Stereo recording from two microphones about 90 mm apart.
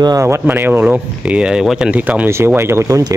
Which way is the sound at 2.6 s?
30° right (ahead or behind).